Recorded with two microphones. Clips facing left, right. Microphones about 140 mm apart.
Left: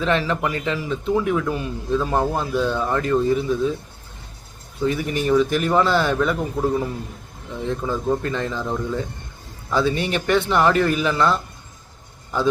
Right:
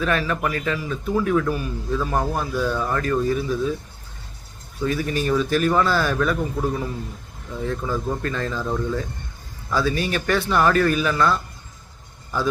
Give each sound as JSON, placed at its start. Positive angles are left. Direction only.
{"t": 0.0, "sound": "a man's voice", "side_deg": 25}
{"t": 4.8, "sound": "a man's voice", "side_deg": 20}